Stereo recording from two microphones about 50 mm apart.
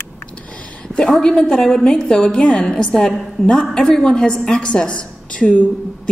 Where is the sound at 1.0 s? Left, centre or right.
Centre.